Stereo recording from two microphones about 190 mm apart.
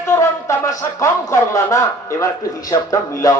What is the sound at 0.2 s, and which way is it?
Speech, 15° left (ahead or behind).